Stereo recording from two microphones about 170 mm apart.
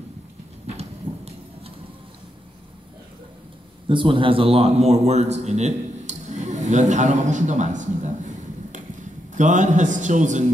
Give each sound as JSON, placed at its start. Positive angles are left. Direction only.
{"t": 0.7, "sound": "thunder", "side_deg": -35}
{"t": 3.9, "sound": "a man's voice", "side_deg": -30}